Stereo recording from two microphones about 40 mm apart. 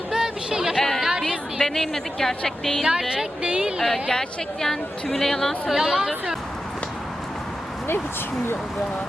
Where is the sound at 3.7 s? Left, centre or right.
Centre.